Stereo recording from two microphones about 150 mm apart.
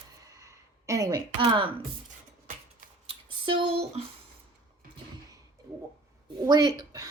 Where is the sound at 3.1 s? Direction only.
35° right (ahead or behind).